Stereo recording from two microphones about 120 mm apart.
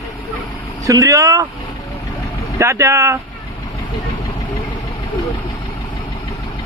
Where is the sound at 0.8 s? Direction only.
30° right (ahead or behind).